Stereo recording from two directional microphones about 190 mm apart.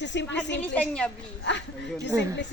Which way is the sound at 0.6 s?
5° left (ahead or behind).